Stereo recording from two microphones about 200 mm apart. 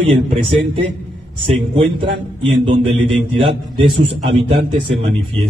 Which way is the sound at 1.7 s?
25° right (ahead or behind).